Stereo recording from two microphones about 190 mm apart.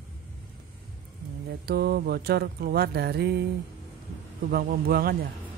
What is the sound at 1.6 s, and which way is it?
Mantra, 55° right (ahead or behind).